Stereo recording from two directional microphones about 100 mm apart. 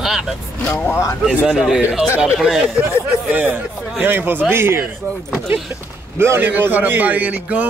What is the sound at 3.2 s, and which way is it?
A man's voice, 15° right (ahead or behind).